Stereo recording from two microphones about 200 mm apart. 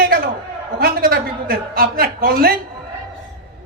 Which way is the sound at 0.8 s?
50° right (ahead or behind).